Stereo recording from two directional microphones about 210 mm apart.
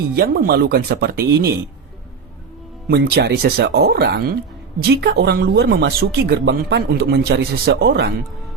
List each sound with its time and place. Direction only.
0.2 s speech: 45° right (ahead or behind)
2.8 s speech: 50° right (ahead or behind)